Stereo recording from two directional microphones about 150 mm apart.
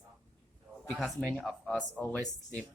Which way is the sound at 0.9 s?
Centre (ahead or behind).